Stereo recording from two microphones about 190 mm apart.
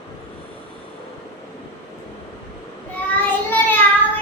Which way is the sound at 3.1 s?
10° left (ahead or behind).